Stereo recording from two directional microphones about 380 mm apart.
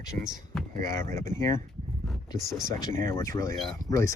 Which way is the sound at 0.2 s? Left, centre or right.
Centre.